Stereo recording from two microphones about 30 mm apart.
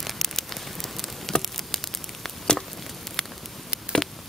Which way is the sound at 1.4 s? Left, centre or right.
Centre.